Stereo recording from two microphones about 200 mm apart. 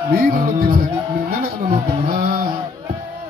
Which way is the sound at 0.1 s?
45° right (ahead or behind).